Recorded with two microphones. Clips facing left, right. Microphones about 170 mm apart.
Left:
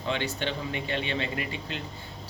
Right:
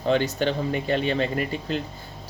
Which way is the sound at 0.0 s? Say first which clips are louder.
Right 8 dB; 40° right (ahead or behind).